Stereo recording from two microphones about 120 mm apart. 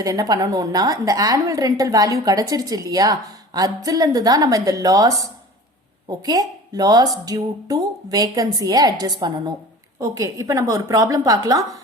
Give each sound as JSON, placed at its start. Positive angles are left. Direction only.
{"t": 0.0, "sound": "a woman's voice", "side_deg": -30}